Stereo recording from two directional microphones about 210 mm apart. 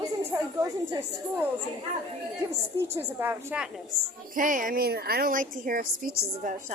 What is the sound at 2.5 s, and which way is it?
A woman's voice, 15° right (ahead or behind).